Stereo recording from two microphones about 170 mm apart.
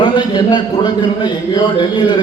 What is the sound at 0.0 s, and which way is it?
A man's voice, 25° left (ahead or behind).